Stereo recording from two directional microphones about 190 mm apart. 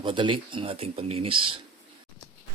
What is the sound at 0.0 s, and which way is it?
Speech, 25° right (ahead or behind).